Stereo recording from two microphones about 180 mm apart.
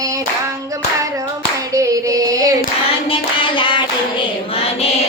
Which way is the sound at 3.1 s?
25° left (ahead or behind).